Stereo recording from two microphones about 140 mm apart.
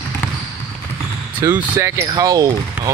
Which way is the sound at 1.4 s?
20° right (ahead or behind).